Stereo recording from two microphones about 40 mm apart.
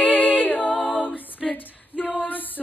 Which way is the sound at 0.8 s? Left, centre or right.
Right.